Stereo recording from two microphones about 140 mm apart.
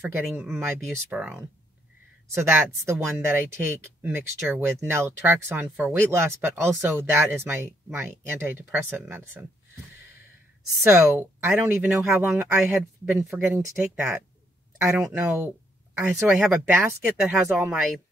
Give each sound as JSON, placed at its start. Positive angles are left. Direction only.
{"t": 0.4, "sound": "speech", "side_deg": -15}
{"t": 10.8, "sound": "speech", "side_deg": -20}
{"t": 16.2, "sound": "speech", "side_deg": 0}
{"t": 16.6, "sound": "speech", "side_deg": -15}